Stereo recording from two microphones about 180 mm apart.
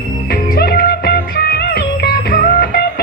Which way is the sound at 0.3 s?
55° left (ahead or behind).